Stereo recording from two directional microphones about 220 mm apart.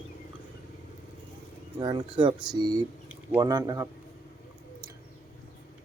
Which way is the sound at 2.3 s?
5° right (ahead or behind).